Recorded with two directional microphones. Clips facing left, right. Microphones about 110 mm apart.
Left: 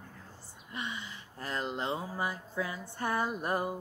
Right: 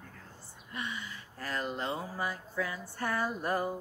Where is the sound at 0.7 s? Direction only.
20° left (ahead or behind).